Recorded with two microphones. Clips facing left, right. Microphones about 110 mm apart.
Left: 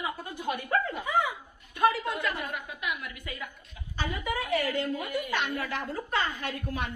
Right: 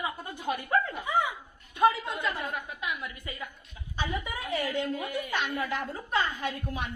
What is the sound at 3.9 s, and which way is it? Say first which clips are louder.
A woman's voice: left 2 dB; 20° right (ahead or behind).